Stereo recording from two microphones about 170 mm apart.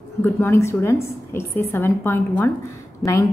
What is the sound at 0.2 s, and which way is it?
A woman's voice, 15° left (ahead or behind).